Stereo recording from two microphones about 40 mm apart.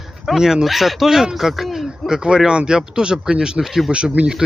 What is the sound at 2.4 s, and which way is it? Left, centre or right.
Speech, right.